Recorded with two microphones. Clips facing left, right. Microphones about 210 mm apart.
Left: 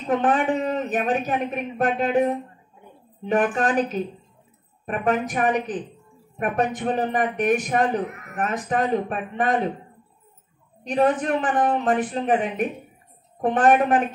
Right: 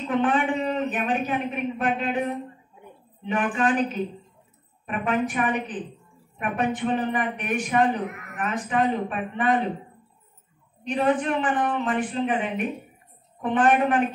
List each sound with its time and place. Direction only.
0.0 s a man's voice: 40° left (ahead or behind)
3.3 s a man's voice: 40° left (ahead or behind)
10.9 s a man's voice: 40° left (ahead or behind)